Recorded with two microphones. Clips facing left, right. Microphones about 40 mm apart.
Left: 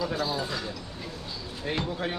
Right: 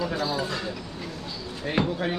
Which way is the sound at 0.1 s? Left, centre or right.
Centre.